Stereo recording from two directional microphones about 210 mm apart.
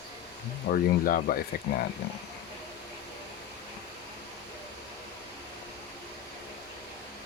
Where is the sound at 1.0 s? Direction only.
40° left (ahead or behind).